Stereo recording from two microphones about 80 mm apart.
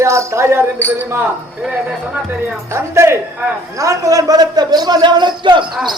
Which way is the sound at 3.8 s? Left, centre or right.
Right.